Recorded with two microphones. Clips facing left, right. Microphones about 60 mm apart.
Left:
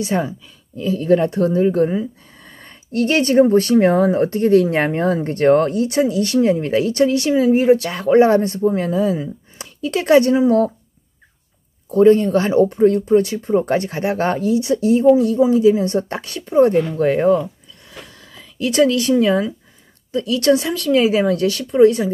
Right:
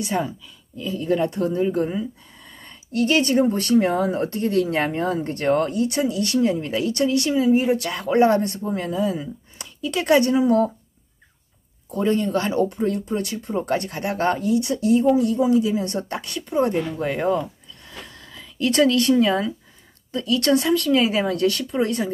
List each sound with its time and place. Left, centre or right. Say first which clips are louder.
0.0 s speech: left 4 dB; centre
0.7 s speech: left 6 dB; left
2.5 s speech: left 3 dB; left
4.0 s speech: left 7 dB; left
7.4 s a woman's voice: left 5 dB; left
11.9 s speech: left 9 dB; left
17.0 s a woman's voice: left 8 dB; centre
17.4 s a sound: left 3 dB; centre
20.4 s a woman's voice: left 3 dB; centre